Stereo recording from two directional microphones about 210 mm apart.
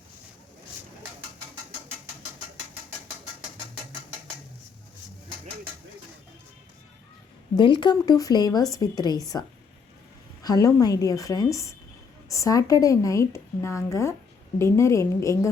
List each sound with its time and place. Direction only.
7.5 s speech: 20° left (ahead or behind)
10.4 s speech: 15° left (ahead or behind)